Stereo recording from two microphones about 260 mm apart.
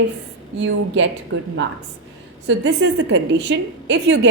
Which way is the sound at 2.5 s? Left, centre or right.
Right.